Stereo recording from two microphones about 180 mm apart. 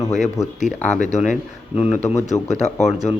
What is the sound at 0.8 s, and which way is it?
Speech, 40° left (ahead or behind).